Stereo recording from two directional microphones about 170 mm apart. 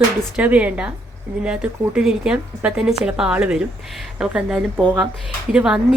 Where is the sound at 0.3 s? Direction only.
10° right (ahead or behind).